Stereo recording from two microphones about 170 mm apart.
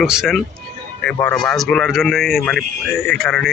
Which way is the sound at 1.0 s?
10° left (ahead or behind).